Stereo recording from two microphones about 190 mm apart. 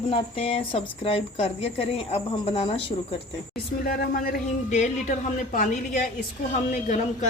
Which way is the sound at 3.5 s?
55° left (ahead or behind).